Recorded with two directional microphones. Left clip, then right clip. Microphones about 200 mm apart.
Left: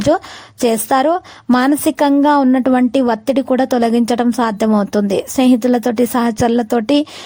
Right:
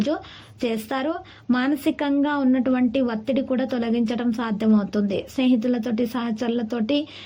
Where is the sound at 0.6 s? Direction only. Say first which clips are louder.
Left 12 dB; 40° left (ahead or behind).